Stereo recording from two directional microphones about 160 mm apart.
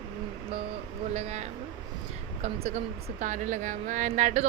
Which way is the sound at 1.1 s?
45° right (ahead or behind).